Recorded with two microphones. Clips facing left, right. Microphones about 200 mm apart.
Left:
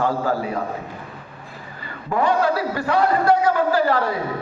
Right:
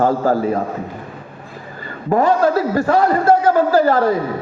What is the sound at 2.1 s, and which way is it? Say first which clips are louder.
A man's voice: right 5 dB; 45° right (ahead or behind).